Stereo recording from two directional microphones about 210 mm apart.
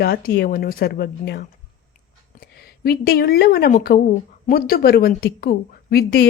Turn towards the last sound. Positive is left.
turn(degrees=50)  # may be behind; listen again after turning